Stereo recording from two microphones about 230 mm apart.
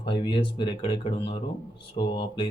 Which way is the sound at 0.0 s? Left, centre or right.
Left.